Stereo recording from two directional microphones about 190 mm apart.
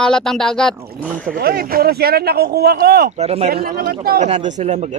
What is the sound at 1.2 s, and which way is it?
Speech, 50° right (ahead or behind).